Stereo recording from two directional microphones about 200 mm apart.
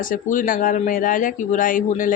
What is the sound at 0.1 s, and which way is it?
Speech, 40° left (ahead or behind).